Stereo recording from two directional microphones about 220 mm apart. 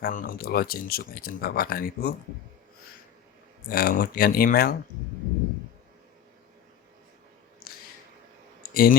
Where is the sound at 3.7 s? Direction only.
40° left (ahead or behind).